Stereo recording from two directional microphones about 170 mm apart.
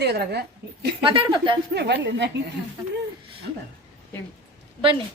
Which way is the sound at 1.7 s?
80° right.